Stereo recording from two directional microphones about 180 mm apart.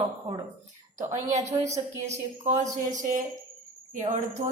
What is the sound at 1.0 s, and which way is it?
Speech, 40° right (ahead or behind).